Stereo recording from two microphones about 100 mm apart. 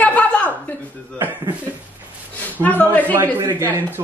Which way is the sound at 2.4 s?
15° left (ahead or behind).